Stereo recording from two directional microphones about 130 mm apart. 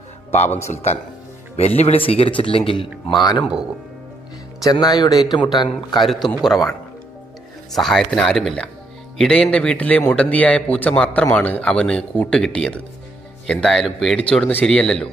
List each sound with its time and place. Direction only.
0.3 s a man's voice: 60° left (ahead or behind)
1.6 s a man's voice: 50° left (ahead or behind); by 3.4 s 35° left (ahead or behind)
4.6 s speech: 30° left (ahead or behind)
5.9 s speech: centre (ahead or behind)
7.7 s a man's voice: centre (ahead or behind)